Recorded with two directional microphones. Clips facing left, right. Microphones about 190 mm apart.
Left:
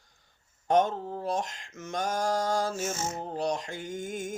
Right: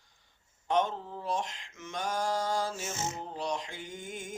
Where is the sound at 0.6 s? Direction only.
45° left (ahead or behind).